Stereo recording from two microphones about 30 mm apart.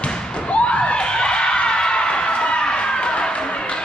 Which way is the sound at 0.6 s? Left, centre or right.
Left.